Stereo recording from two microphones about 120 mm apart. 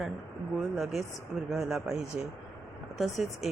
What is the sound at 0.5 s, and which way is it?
Speech, centre (ahead or behind).